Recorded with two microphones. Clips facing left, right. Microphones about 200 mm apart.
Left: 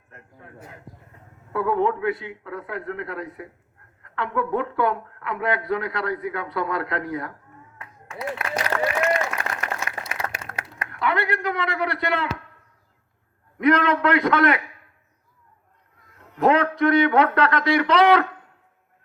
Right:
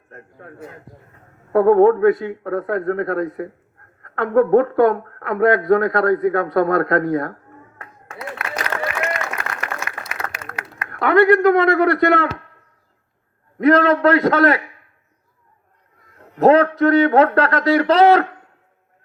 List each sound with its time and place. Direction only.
1.5 s a woman's voice: 45° right (ahead or behind)
8.4 s applause: 35° left (ahead or behind)
9.8 s a sound: 30° left (ahead or behind)
10.7 s speech: 50° right (ahead or behind)
13.6 s a man's voice: 40° right (ahead or behind)
16.1 s a man's voice: 40° right (ahead or behind)